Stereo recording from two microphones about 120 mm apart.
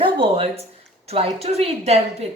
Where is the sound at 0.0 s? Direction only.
50° right (ahead or behind).